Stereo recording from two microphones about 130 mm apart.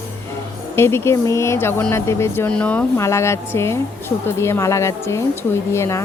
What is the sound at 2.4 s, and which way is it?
Speech, 10° left (ahead or behind).